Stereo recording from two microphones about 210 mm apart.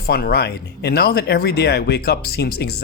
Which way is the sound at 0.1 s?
50° left (ahead or behind).